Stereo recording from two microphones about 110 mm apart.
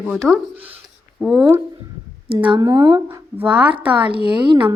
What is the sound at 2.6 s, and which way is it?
Speech, 35° right (ahead or behind).